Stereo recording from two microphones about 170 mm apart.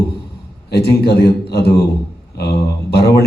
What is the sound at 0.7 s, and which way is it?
Speech, 75° left (ahead or behind).